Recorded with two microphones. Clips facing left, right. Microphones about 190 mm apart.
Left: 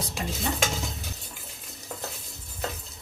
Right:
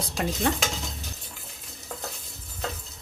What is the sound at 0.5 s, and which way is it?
Speech, 65° right (ahead or behind).